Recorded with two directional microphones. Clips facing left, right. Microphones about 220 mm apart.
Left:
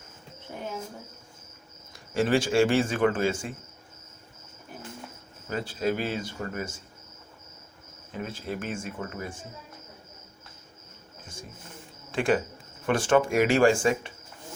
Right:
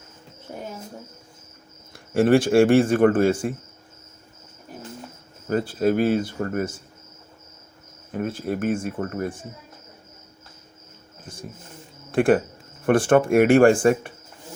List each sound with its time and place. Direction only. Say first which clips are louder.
0.5 s speech: right 3 dB; 40° right (ahead or behind)
2.1 s speech: right 7 dB; 55° right (ahead or behind)
5.5 s speech: right 7 dB; 50° right (ahead or behind)
8.1 s speech: right 7 dB; 50° right (ahead or behind)
12.1 s speech: right 7 dB; 55° right (ahead or behind)